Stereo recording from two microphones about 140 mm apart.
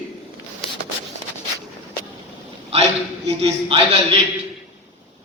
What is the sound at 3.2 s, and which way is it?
Speech, 45° right (ahead or behind).